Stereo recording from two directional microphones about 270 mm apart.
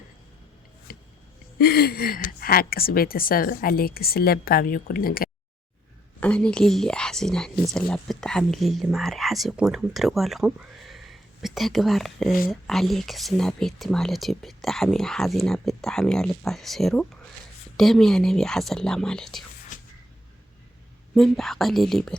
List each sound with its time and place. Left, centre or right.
0.9 s a sound: left
1.5 s a woman's voice: left
6.1 s speech: centre
21.2 s speech: centre